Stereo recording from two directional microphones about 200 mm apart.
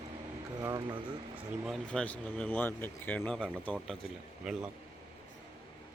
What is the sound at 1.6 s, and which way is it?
Speech, 5° left (ahead or behind).